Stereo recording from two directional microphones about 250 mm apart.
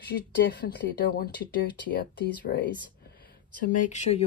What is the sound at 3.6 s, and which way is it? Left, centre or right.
Speech, left.